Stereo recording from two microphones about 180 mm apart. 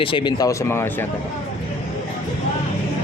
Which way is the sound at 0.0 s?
30° left (ahead or behind).